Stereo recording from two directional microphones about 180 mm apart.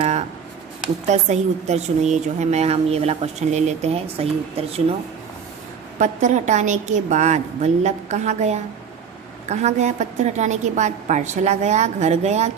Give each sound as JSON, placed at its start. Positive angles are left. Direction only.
{"t": 0.0, "sound": "a sound", "side_deg": -35}
{"t": 1.0, "sound": "a woman's voice", "side_deg": -40}
{"t": 6.0, "sound": "a woman's voice", "side_deg": -40}